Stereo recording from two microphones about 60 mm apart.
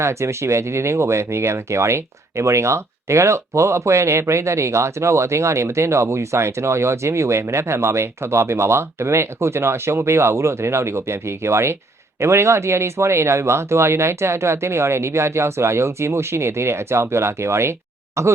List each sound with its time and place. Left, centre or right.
0.0 s speech: right